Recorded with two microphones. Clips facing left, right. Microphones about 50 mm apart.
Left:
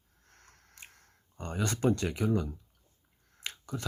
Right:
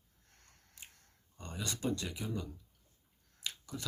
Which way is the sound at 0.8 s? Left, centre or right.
Left.